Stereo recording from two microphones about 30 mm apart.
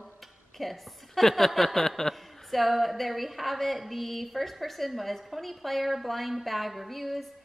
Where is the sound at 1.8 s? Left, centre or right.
Centre.